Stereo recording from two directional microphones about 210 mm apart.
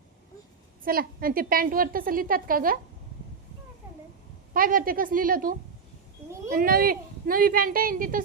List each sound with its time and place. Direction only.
0.9 s a woman's voice: 45° right (ahead or behind)
4.5 s a woman's voice: 40° right (ahead or behind)